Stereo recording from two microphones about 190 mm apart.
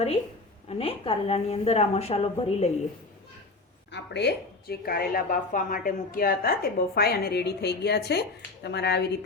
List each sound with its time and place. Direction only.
0.7 s a woman's voice: 30° left (ahead or behind)
3.9 s a woman's voice: 65° left (ahead or behind)